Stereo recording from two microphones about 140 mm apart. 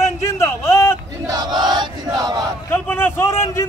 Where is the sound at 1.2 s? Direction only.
25° right (ahead or behind).